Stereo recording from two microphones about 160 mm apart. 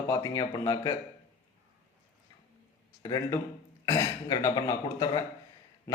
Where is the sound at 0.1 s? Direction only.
25° left (ahead or behind).